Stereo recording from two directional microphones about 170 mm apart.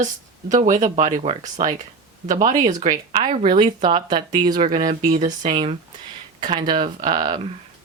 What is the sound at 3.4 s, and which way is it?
Speech, 30° right (ahead or behind).